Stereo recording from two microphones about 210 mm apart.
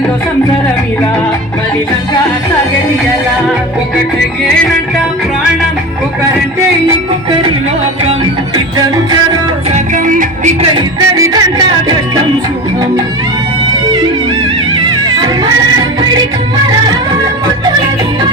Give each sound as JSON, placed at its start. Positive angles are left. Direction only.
{"t": 9.7, "sound": "music", "side_deg": -40}
{"t": 10.8, "sound": "music", "side_deg": -20}